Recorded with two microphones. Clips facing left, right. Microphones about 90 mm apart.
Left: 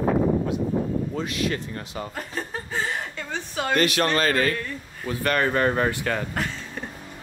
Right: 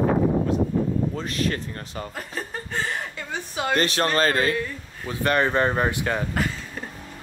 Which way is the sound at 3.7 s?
35° right (ahead or behind).